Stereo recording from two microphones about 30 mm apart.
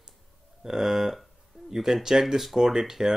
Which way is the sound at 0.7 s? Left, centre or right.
Centre.